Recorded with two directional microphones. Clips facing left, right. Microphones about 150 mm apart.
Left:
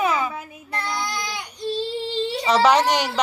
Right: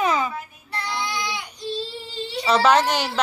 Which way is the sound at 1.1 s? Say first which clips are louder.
Right 1 dB; 45° left (ahead or behind).